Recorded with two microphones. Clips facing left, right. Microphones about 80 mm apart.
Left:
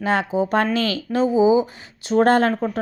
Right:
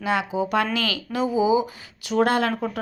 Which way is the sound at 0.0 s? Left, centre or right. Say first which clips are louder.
Left 3 dB; left.